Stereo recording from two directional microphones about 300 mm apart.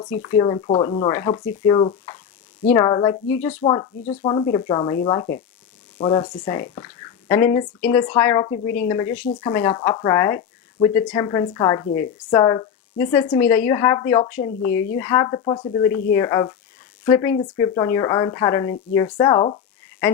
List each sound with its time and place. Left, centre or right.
0.2 s speech: centre
3.8 s speech: centre
8.5 s speech: left
9.1 s speech: centre
14.6 s speech: left
14.9 s speech: centre
17.6 s speech: centre